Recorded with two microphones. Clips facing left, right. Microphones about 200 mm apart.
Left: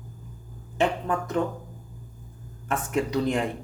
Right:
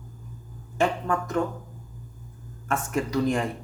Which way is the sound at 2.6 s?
20° left (ahead or behind).